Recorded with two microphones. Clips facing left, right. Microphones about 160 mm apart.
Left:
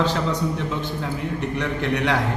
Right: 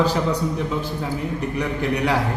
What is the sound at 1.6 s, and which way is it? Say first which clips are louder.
Speech: right 2 dB; 5° right (ahead or behind).